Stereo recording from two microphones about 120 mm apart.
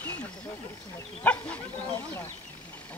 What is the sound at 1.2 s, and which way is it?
Speech, 10° left (ahead or behind).